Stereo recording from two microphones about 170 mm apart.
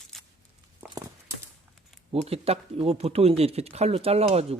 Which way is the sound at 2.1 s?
35° right (ahead or behind).